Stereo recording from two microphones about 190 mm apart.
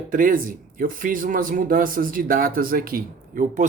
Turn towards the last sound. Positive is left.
turn(degrees=-45)  # may be behind; listen again after turning